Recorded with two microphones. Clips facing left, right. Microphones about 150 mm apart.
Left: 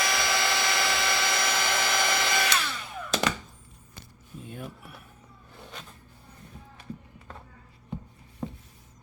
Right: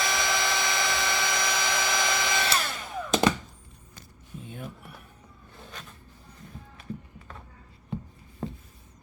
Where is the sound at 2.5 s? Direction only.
45° right (ahead or behind).